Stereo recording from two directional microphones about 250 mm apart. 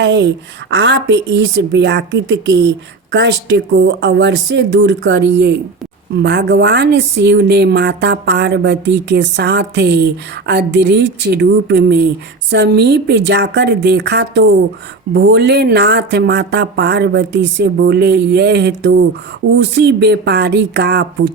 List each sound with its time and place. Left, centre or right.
0.0 s speech: right